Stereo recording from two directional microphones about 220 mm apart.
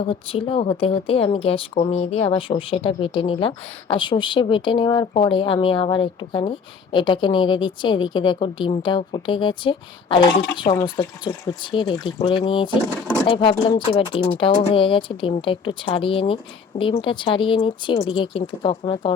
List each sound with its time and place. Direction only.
0.0 s speech: 25° left (ahead or behind)